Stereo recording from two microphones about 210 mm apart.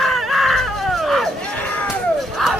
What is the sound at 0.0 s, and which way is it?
Screaming, centre (ahead or behind).